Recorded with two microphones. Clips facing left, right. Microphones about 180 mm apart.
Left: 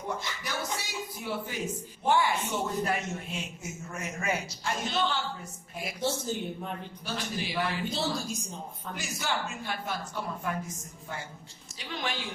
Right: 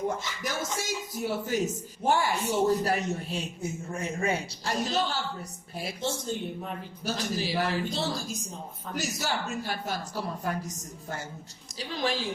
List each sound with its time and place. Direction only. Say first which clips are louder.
0.4 s speech: right 5 dB; 45° right (ahead or behind)
6.0 s speech: left 2 dB; 10° left (ahead or behind)
7.0 s speech: right 5 dB; 40° right (ahead or behind)
7.9 s a woman's voice: even; centre (ahead or behind)
9.0 s speech: right 2 dB; 40° right (ahead or behind)